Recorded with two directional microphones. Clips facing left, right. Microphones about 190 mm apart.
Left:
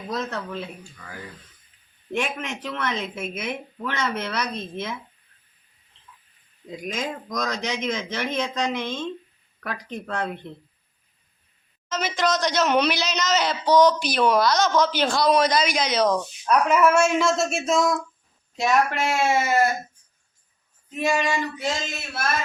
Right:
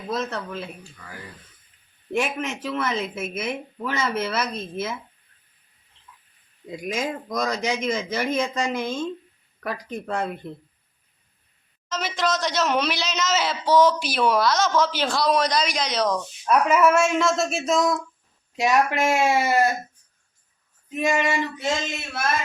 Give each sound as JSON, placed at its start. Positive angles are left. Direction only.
{"t": 0.1, "sound": "speech", "side_deg": 0}
{"t": 2.1, "sound": "speech", "side_deg": -5}
{"t": 6.7, "sound": "speech", "side_deg": -10}
{"t": 11.9, "sound": "speech", "side_deg": 0}
{"t": 18.5, "sound": "speech", "side_deg": -10}
{"t": 21.1, "sound": "female singing", "side_deg": -20}